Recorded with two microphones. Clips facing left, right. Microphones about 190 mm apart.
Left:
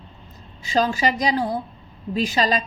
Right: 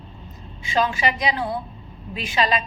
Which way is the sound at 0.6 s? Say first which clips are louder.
Left 2 dB; 35° left (ahead or behind).